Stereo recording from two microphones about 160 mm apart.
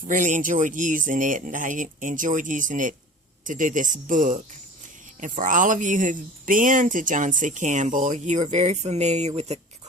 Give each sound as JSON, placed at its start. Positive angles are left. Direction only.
{"t": 0.1, "sound": "speech", "side_deg": -55}